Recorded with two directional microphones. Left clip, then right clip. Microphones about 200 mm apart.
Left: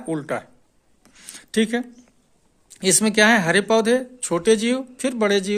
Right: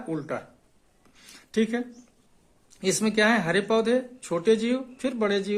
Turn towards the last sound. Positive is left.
turn(degrees=45)  # may be behind; listen again after turning